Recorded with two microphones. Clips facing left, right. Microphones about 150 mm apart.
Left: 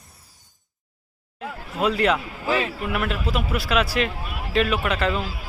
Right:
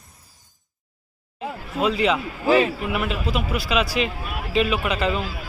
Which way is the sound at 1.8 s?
Centre (ahead or behind).